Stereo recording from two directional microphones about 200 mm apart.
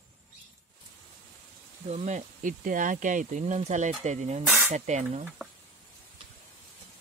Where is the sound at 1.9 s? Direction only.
35° right (ahead or behind).